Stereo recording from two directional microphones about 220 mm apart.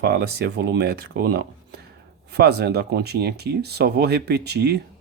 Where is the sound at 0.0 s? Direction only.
50° right (ahead or behind).